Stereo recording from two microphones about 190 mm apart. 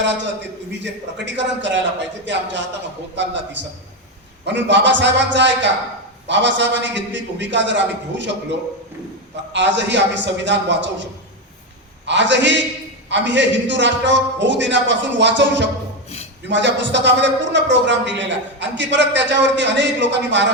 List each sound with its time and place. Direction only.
0.7 s a man's voice: 70° right (ahead or behind)
9.5 s a man's voice: 70° right (ahead or behind)